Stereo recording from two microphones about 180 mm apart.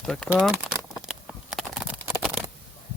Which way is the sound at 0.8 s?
Centre (ahead or behind).